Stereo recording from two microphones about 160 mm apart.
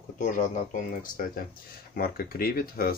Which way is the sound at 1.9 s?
70° left (ahead or behind).